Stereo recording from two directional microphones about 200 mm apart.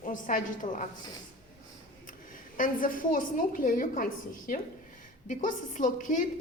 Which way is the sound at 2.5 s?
45° left (ahead or behind).